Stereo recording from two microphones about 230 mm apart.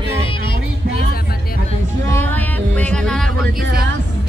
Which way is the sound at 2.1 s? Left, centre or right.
Centre.